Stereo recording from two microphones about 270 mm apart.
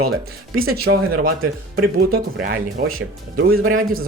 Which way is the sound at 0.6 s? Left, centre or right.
Right.